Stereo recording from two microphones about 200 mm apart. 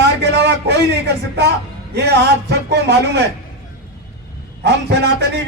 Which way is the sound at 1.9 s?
60° right (ahead or behind).